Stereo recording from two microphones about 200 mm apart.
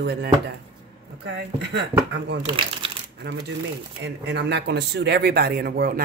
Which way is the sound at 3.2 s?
55° right (ahead or behind).